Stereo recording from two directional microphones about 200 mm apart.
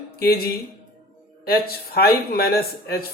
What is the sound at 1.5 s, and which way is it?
A man's voice, 50° left (ahead or behind).